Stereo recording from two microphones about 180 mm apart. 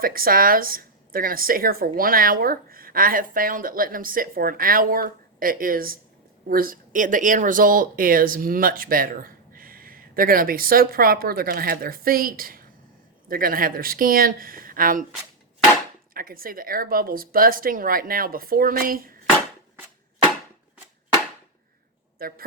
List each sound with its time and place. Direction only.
0.0 s speech: 55° right (ahead or behind)
16.1 s speech: 55° right (ahead or behind)